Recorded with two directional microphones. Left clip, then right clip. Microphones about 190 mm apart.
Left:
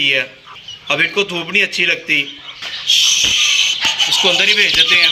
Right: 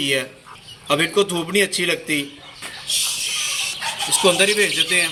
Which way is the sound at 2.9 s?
Centre (ahead or behind).